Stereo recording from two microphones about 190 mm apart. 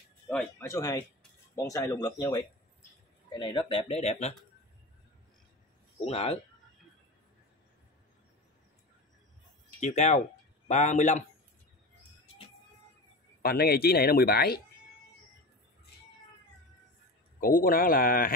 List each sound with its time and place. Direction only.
0.3 s speech: 10° left (ahead or behind); by 4.4 s 35° left (ahead or behind)
5.9 s speech: 30° left (ahead or behind)
9.8 s speech: 35° left (ahead or behind)
13.4 s speech: 50° left (ahead or behind)
17.4 s speech: 50° left (ahead or behind)